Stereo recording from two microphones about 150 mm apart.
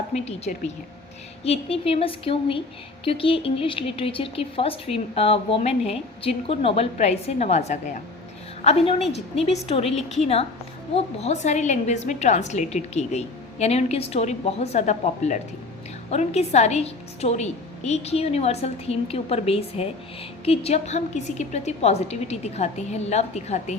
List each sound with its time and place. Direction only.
0.5 s speech: 65° left (ahead or behind)
1.5 s a woman's voice: 40° left (ahead or behind)